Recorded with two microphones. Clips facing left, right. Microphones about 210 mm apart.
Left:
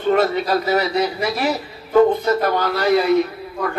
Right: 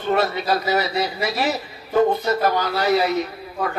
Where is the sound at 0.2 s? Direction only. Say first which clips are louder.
Left 3 dB; 50° left (ahead or behind).